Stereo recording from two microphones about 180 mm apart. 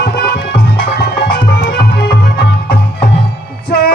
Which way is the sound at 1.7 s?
60° left (ahead or behind).